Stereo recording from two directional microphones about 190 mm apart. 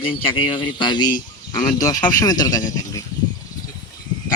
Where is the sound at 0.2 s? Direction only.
25° left (ahead or behind).